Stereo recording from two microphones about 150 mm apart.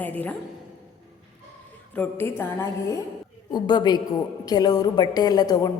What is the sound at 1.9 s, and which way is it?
A woman's voice, 15° left (ahead or behind).